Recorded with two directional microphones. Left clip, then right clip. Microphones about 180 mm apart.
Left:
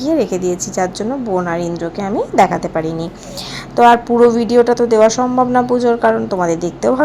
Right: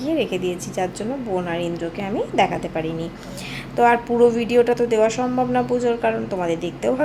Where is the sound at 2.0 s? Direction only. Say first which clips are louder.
Left 7 dB; 25° left (ahead or behind).